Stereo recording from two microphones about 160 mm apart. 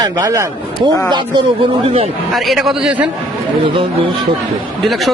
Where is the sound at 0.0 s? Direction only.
25° right (ahead or behind).